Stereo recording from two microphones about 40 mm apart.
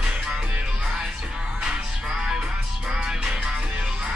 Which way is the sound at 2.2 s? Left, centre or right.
Centre.